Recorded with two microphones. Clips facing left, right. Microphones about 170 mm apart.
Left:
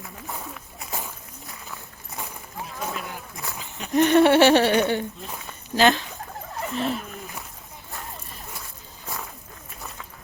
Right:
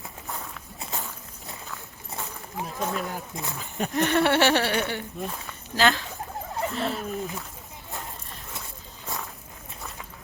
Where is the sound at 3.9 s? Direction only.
20° left (ahead or behind).